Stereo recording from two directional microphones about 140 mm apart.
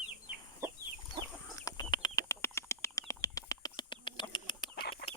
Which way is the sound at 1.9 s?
30° left (ahead or behind).